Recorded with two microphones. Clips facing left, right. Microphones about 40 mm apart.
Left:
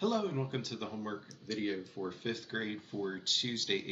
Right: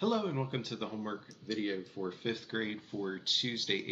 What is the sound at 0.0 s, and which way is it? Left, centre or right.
Speech, centre.